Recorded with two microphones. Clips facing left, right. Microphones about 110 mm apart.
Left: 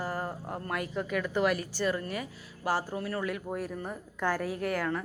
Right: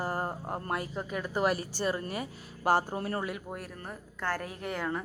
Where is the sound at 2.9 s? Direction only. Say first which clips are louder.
Right 1 dB; 40° right (ahead or behind).